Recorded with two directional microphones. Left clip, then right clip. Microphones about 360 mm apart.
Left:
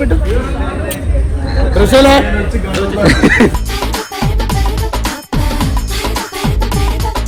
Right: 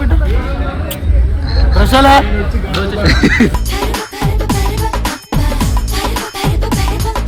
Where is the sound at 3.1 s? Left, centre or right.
Centre.